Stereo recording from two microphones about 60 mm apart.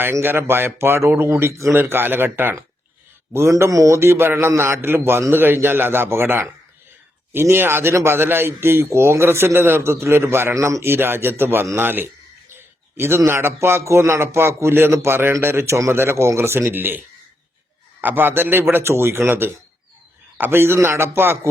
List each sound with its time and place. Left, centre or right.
0.0 s speech: right
1.8 s a man's voice: right
3.3 s a man's voice: right
10.8 s a man's voice: right
18.0 s a man's voice: right